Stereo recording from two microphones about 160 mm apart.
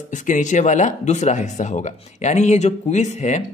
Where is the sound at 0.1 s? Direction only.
50° left (ahead or behind).